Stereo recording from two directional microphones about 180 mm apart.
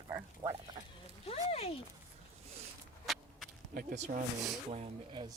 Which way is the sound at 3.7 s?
55° right (ahead or behind).